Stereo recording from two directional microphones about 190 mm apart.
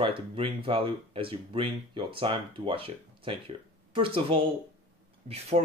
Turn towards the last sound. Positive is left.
turn(degrees=-35)  # may be behind; listen again after turning